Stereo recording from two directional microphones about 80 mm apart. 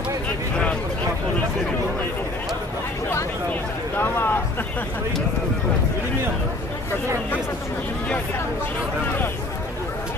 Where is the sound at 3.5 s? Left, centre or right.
Left.